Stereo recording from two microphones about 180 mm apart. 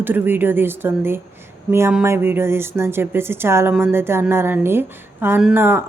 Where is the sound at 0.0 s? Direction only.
10° right (ahead or behind).